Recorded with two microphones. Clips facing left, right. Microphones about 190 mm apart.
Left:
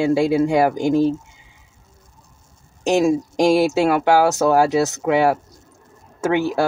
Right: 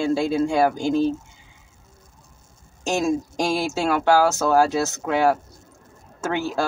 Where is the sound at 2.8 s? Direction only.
15° left (ahead or behind).